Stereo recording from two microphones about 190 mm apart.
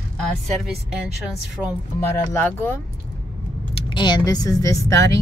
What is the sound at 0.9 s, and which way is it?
Speech, 5° right (ahead or behind).